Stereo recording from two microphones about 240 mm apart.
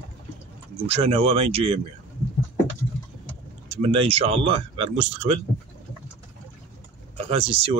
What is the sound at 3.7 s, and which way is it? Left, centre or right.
Speech, right.